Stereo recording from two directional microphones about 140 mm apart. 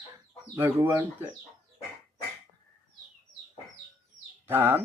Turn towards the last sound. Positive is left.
turn(degrees=-15)  # may be behind; listen again after turning